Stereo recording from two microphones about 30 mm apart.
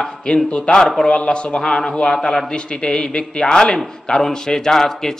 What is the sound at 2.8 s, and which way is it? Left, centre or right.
A man's voice, left.